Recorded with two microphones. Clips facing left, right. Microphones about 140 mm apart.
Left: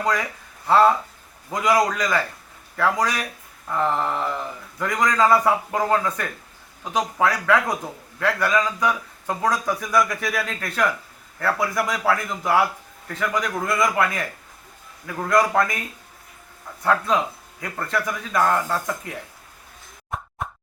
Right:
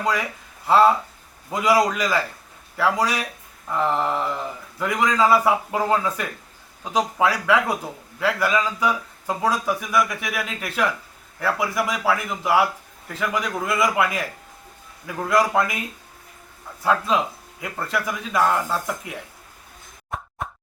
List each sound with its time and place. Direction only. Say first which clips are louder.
0.0 s speech: even; 10° right (ahead or behind)
17.6 s speech: even; 10° right (ahead or behind)
20.1 s plop: even; centre (ahead or behind)